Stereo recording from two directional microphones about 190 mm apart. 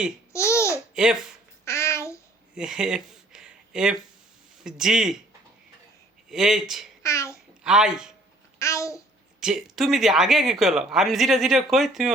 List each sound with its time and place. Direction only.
0.3 s babbling: 15° left (ahead or behind)
2.6 s a sound: 5° right (ahead or behind)
4.6 s speech: 5° right (ahead or behind)
6.3 s speech: centre (ahead or behind)
7.0 s babbling: 15° left (ahead or behind)
7.6 s speech: 5° right (ahead or behind)
8.5 s babbling: 15° left (ahead or behind)
9.4 s speech: centre (ahead or behind)